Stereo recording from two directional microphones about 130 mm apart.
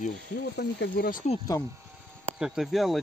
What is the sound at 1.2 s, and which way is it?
Speech, 70° left (ahead or behind).